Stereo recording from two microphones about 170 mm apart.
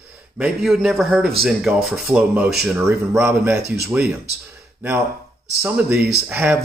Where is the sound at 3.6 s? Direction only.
75° right (ahead or behind).